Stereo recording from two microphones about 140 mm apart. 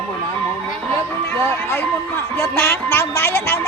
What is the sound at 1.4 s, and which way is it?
A woman's voice, 15° left (ahead or behind).